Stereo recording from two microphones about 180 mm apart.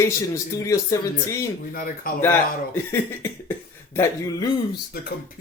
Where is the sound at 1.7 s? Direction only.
55° left (ahead or behind).